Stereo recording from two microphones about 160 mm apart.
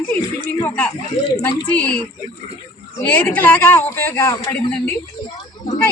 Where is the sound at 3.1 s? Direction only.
10° left (ahead or behind).